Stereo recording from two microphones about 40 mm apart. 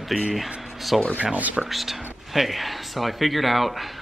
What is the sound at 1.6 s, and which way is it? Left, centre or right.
Speech, centre.